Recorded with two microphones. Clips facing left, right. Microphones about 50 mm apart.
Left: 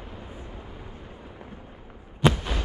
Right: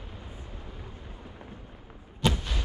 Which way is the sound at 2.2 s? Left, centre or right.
Left.